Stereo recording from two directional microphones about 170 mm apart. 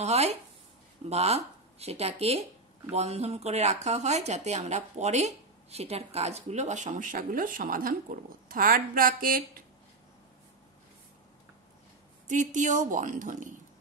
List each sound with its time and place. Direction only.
0.0 s speech: 40° right (ahead or behind); by 9.4 s 55° right (ahead or behind)
12.3 s a woman's voice: 45° right (ahead or behind)